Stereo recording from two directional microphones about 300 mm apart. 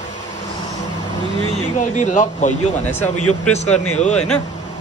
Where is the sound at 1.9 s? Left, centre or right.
Left.